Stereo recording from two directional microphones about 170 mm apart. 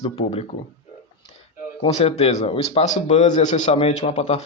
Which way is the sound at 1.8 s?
40° left (ahead or behind).